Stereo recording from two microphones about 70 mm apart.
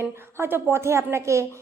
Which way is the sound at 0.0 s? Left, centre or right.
Right.